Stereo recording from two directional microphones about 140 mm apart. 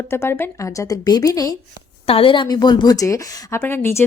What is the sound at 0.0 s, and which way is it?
A woman's voice, 20° left (ahead or behind).